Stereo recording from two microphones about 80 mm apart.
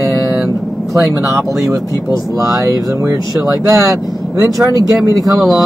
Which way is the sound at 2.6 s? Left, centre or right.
Right.